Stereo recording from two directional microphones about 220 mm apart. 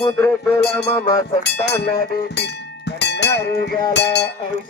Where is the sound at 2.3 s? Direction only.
50° left (ahead or behind).